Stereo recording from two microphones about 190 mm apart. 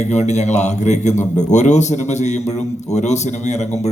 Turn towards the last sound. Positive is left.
turn(degrees=35)  # may be behind; listen again after turning